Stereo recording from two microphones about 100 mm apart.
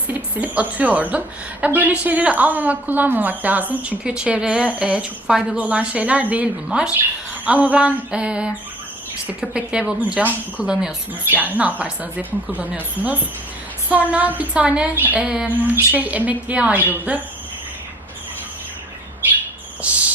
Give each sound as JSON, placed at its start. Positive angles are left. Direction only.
{"t": 0.1, "sound": "a woman's voice", "side_deg": -15}